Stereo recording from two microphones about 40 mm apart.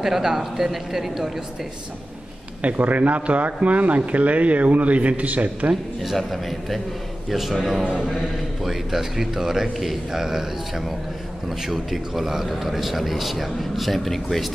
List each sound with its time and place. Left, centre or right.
0.0 s speech: centre
2.6 s a man's voice: right
6.0 s a man's voice: centre